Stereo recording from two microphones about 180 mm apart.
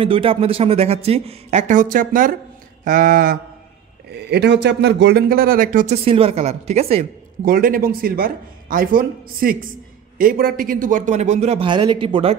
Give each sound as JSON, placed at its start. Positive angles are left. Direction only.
{"t": 0.0, "sound": "speech", "side_deg": -30}
{"t": 4.1, "sound": "a man's voice", "side_deg": -65}
{"t": 6.0, "sound": "speech", "side_deg": -30}
{"t": 7.4, "sound": "speech", "side_deg": -55}